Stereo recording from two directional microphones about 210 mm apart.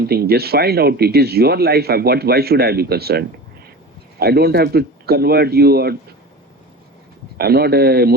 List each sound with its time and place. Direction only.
0.0 s speech: 50° right (ahead or behind)
7.3 s speech: 50° right (ahead or behind)